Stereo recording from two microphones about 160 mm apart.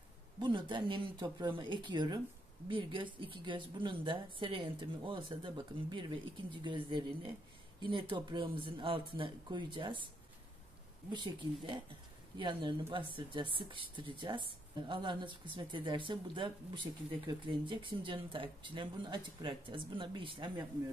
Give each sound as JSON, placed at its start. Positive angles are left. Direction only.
{"t": 0.4, "sound": "speech", "side_deg": -30}
{"t": 11.1, "sound": "speech", "side_deg": -30}